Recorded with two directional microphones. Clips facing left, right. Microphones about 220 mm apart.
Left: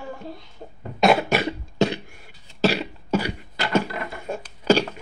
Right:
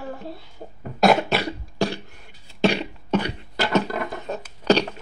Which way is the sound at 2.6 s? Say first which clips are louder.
Right 1 dB; 5° left (ahead or behind).